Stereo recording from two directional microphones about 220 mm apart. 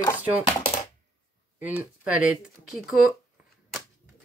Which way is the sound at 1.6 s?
5° right (ahead or behind).